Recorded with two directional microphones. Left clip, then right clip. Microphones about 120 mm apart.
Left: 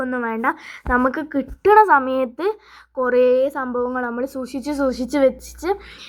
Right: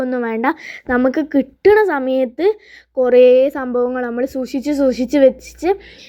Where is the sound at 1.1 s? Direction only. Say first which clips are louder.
Right 7 dB; 30° right (ahead or behind).